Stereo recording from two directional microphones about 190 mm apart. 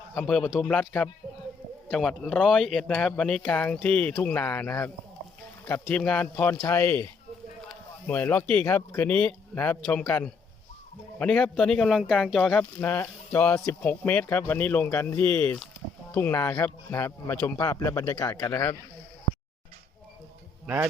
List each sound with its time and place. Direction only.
0.1 s speech: centre (ahead or behind)
5.9 s speech: 5° left (ahead or behind)
20.7 s a man's voice: 10° right (ahead or behind)